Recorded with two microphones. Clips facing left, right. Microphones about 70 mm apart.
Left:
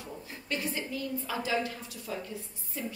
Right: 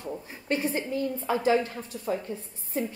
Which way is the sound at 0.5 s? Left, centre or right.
Right.